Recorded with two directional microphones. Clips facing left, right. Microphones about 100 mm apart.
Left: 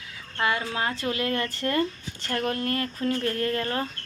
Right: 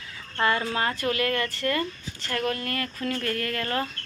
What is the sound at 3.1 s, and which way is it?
Speech, 25° left (ahead or behind).